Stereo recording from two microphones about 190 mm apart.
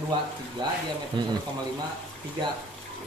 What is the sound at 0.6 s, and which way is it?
Speech, 25° right (ahead or behind).